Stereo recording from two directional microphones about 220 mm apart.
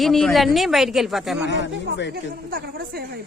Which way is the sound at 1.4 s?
55° left (ahead or behind).